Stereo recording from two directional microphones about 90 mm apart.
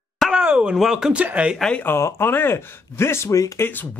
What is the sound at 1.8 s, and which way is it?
Speech, 30° left (ahead or behind).